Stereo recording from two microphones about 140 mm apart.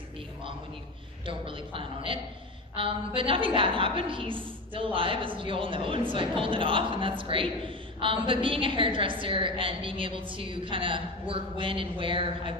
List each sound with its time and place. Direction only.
1.3 s a woman's voice: 40° right (ahead or behind)